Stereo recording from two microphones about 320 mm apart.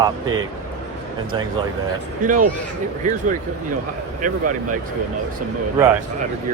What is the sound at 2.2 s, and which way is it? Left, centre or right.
Speech, right.